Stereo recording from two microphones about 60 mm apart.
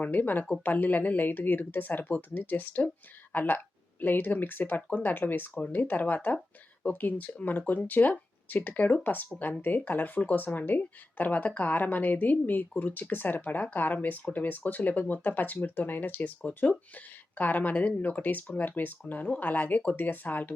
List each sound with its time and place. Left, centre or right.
0.0 s speech: left